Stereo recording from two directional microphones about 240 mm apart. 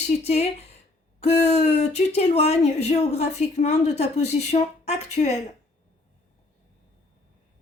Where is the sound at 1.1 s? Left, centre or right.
Left.